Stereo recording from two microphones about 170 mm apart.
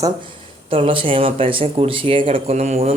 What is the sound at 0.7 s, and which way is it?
Speech, 30° right (ahead or behind).